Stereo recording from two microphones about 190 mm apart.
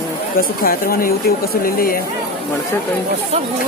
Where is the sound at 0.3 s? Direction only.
50° left (ahead or behind).